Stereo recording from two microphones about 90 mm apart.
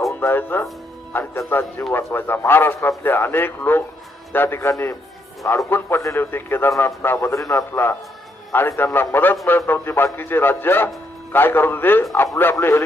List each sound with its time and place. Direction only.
0.2 s a man's voice: 25° left (ahead or behind)
5.6 s a man's voice: 25° left (ahead or behind)
7.3 s a man's voice: 35° left (ahead or behind)